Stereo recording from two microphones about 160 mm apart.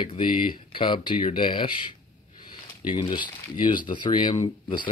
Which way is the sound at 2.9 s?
30° left (ahead or behind).